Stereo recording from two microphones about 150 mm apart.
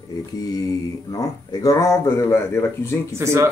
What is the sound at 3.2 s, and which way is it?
Speech, 20° right (ahead or behind).